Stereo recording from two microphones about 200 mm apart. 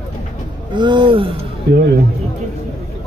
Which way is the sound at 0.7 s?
25° right (ahead or behind).